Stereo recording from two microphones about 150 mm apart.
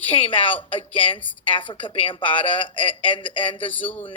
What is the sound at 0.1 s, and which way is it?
A woman's voice, 35° left (ahead or behind).